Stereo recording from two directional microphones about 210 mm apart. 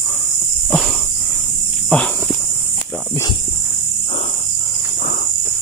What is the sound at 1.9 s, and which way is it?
Walk, 5° left (ahead or behind).